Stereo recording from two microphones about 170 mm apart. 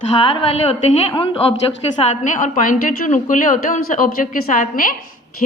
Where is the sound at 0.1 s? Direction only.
30° left (ahead or behind).